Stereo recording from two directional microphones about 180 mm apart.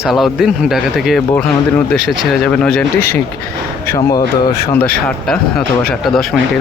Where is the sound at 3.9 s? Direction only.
20° left (ahead or behind).